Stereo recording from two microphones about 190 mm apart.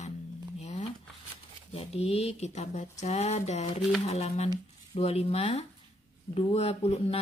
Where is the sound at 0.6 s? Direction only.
35° left (ahead or behind).